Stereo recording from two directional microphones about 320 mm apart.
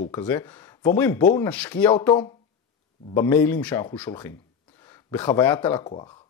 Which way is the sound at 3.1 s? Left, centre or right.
Centre.